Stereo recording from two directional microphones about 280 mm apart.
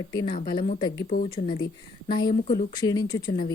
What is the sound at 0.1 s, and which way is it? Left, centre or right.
Speech, centre.